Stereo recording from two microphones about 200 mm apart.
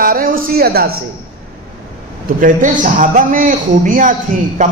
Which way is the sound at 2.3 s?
40° right (ahead or behind).